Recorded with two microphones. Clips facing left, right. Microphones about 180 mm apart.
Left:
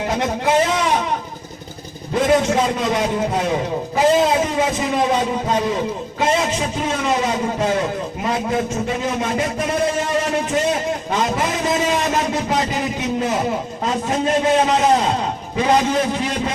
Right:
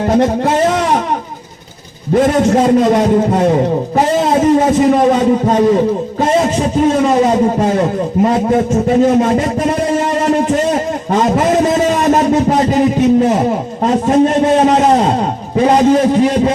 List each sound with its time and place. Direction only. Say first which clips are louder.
0.0 s a man's voice: right 8 dB; 45° right (ahead or behind)
2.1 s a man's voice: right 6 dB; 50° right (ahead or behind)
3.9 s a sound: right 1 dB; 45° right (ahead or behind)
5.5 s a man's voice: right 9 dB; 40° right (ahead or behind)
11.1 s a sound: right 10 dB; 45° right (ahead or behind)
14.5 s a man's voice: right 6 dB; 45° right (ahead or behind)